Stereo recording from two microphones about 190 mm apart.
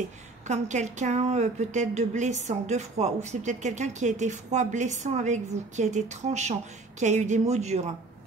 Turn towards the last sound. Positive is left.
turn(degrees=-35)  # may be behind; listen again after turning